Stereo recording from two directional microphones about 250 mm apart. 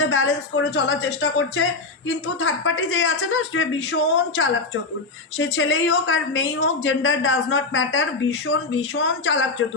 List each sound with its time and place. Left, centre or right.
0.0 s speech: left